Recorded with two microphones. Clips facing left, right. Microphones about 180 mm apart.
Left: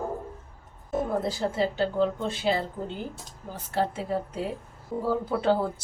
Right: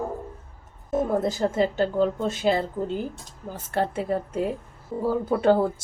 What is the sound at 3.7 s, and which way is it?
Speech, 55° right (ahead or behind).